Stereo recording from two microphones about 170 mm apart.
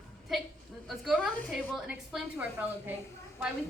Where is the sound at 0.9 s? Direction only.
5° right (ahead or behind).